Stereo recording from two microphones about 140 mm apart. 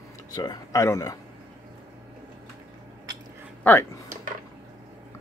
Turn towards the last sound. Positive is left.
turn(degrees=10)  # may be behind; listen again after turning